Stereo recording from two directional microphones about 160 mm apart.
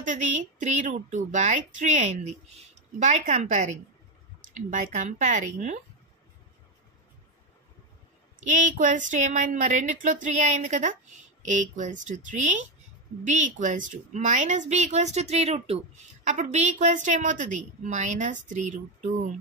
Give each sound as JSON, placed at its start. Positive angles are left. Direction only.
{"t": 0.0, "sound": "a woman's voice", "side_deg": -50}
{"t": 8.4, "sound": "a woman's voice", "side_deg": -50}